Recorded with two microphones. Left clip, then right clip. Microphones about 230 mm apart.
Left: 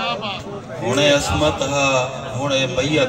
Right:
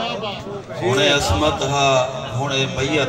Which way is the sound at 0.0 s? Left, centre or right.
Left.